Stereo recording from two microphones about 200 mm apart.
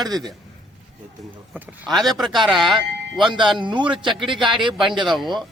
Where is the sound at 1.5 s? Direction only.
5° right (ahead or behind).